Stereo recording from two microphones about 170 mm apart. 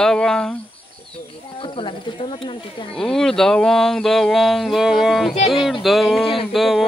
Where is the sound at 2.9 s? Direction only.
5° left (ahead or behind).